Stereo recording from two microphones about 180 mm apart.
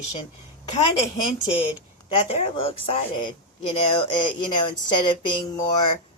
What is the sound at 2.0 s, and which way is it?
Speech, 35° left (ahead or behind).